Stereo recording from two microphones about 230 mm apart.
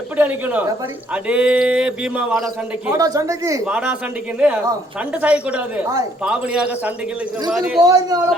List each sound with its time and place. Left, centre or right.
0.2 s speech: centre
3.0 s speech: centre
7.8 s speech: centre